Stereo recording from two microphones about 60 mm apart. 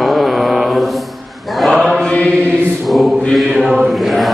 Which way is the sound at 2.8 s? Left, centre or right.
Centre.